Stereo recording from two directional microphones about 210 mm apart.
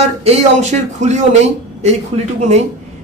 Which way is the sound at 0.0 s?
30° right (ahead or behind).